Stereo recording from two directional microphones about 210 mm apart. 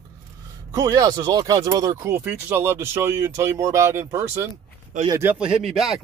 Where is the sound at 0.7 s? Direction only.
15° right (ahead or behind).